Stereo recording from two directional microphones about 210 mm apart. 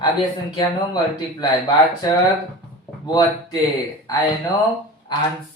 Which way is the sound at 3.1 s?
20° left (ahead or behind).